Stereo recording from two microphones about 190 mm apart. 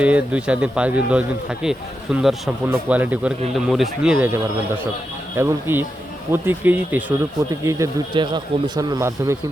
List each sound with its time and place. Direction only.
0.0 s speech: 5° right (ahead or behind)
5.4 s speech: 15° right (ahead or behind)